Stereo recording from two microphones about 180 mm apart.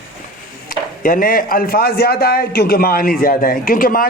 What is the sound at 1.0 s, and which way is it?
A man's voice, 50° left (ahead or behind).